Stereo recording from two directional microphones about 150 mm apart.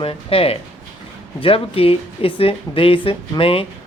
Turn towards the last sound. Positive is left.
turn(degrees=40)  # may be behind; listen again after turning